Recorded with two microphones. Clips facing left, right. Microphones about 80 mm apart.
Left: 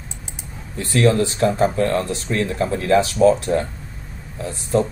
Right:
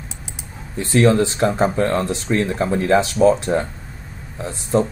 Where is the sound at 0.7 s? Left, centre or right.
Right.